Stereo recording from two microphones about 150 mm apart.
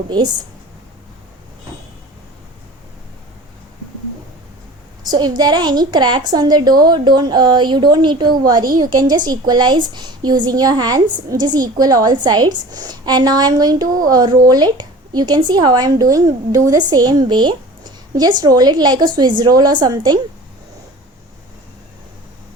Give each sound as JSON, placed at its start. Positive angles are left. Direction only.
{"t": 5.0, "sound": "speech", "side_deg": -30}